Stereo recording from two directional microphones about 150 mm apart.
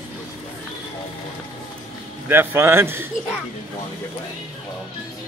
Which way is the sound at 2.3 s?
15° right (ahead or behind).